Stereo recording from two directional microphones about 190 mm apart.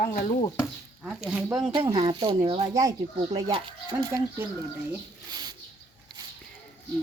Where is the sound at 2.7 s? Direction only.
20° right (ahead or behind).